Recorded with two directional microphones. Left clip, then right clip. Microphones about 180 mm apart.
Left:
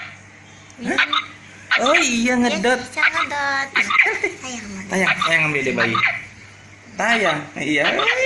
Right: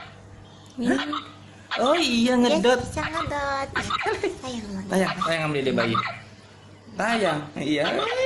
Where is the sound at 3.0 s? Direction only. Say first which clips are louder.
Left 10 dB; 20° right (ahead or behind).